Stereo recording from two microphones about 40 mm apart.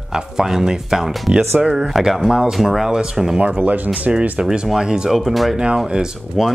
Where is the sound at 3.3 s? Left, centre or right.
Right.